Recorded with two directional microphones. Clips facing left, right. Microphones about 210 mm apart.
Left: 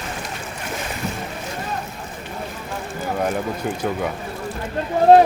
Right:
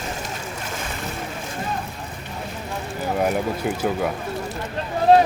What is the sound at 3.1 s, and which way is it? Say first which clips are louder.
Speech: right 1 dB; 10° right (ahead or behind).